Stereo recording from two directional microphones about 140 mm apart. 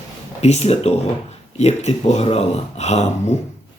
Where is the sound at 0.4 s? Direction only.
50° left (ahead or behind).